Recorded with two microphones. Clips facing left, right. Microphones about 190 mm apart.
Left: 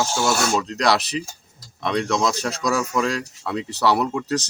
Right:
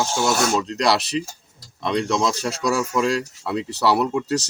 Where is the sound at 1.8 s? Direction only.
Centre (ahead or behind).